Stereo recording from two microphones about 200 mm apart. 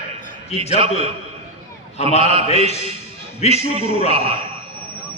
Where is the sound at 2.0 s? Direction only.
30° left (ahead or behind).